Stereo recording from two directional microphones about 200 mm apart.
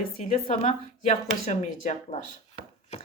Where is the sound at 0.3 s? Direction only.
30° left (ahead or behind).